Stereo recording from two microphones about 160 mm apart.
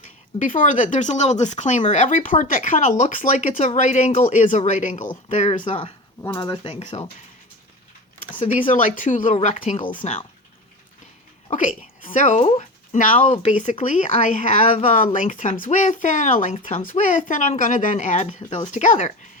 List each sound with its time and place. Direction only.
0.0 s speech: 55° left (ahead or behind)
6.2 s speech: 25° left (ahead or behind)
6.7 s speech: 40° left (ahead or behind)
8.7 s speech: 55° left (ahead or behind)
9.8 s speech: 30° left (ahead or behind)
11.5 s speech: 55° left (ahead or behind)
13.2 s speech: 40° left (ahead or behind)